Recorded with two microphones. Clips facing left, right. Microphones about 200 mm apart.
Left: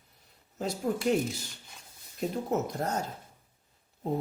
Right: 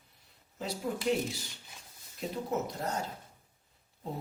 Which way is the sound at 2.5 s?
45° left (ahead or behind).